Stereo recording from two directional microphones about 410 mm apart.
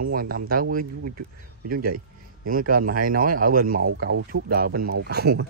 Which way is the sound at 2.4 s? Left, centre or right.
Centre.